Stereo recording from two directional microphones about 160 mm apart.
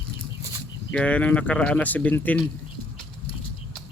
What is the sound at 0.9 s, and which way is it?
Speech, 10° left (ahead or behind).